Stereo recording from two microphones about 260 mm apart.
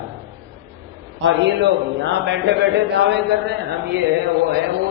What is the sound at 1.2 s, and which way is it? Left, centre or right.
A man's voice, right.